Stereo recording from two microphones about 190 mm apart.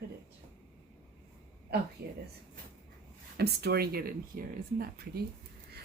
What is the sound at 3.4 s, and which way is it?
A woman's voice, 55° right (ahead or behind).